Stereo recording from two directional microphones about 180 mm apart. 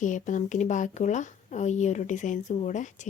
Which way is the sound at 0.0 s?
45° left (ahead or behind).